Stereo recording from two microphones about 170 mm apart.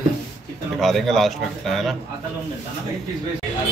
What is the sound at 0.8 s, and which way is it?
Speech, centre (ahead or behind).